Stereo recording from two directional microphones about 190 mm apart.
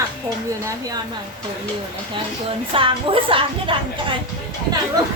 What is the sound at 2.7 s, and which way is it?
A woman's voice, 30° right (ahead or behind).